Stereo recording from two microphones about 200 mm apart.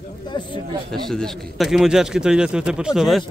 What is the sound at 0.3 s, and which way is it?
Speech, 25° left (ahead or behind).